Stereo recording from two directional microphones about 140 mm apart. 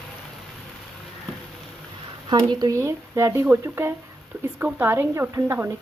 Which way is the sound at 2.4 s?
30° right (ahead or behind).